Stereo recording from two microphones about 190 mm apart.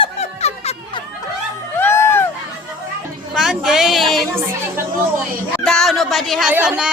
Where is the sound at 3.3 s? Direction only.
Centre (ahead or behind).